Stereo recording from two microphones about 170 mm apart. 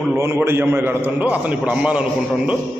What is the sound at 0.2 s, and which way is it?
A man's voice, 15° right (ahead or behind).